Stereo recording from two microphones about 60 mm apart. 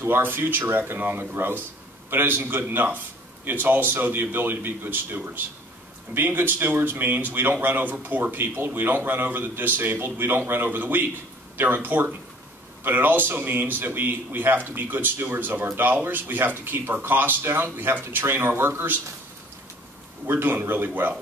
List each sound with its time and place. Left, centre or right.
0.0 s speech: right
20.2 s speech: right